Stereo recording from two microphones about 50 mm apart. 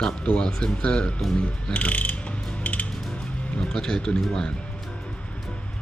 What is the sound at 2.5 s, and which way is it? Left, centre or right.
Music, left.